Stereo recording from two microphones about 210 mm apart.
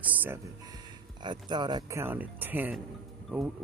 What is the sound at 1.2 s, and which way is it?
Speech, 20° right (ahead or behind).